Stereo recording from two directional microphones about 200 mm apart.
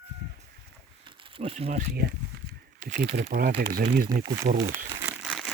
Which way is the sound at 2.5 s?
45° right (ahead or behind).